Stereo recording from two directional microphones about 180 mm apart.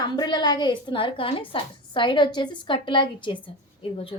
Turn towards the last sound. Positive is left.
turn(degrees=30)  # may be behind; listen again after turning